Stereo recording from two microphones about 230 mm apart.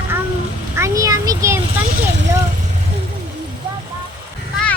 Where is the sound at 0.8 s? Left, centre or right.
Centre.